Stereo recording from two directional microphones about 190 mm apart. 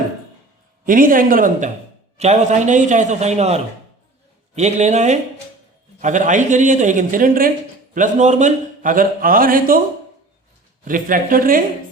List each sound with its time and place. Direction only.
0.9 s a man's voice: 45° right (ahead or behind)
10.8 s speech: 45° right (ahead or behind)